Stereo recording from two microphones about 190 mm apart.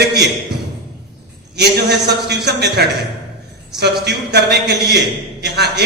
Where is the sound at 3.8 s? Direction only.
60° right (ahead or behind).